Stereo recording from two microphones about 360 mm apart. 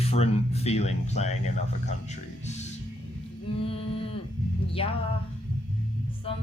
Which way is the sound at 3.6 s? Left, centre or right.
Centre.